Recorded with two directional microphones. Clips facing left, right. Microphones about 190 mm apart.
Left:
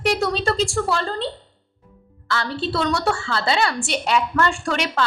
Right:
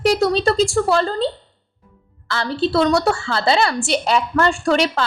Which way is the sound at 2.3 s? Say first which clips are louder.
Right 4 dB; 35° right (ahead or behind).